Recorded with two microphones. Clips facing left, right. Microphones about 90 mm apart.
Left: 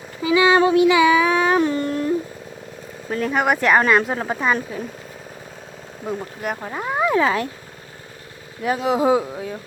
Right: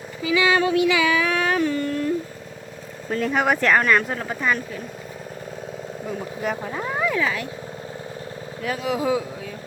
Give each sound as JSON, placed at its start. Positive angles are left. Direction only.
{"t": 0.3, "sound": "a sound", "side_deg": 25}
{"t": 3.1, "sound": "speech", "side_deg": 5}
{"t": 6.4, "sound": "speech", "side_deg": 10}
{"t": 7.2, "sound": "speech", "side_deg": 35}
{"t": 8.6, "sound": "speech", "side_deg": 25}